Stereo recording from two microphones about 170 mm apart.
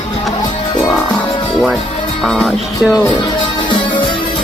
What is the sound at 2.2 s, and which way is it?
Music, centre (ahead or behind).